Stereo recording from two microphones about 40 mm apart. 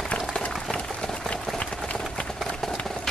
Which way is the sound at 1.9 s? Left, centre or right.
Left.